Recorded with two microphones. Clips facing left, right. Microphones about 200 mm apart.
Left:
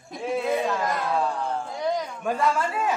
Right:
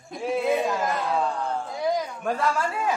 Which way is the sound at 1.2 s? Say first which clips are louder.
Even; 5° left (ahead or behind).